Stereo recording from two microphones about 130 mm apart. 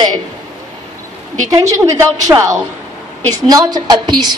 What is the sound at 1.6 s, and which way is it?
A woman's voice, 25° right (ahead or behind).